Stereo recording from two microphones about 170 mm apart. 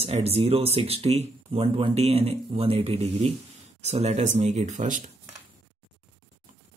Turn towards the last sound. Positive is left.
turn(degrees=-45)  # may be behind; listen again after turning